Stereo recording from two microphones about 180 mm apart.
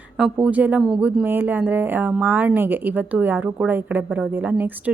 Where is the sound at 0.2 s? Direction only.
10° right (ahead or behind).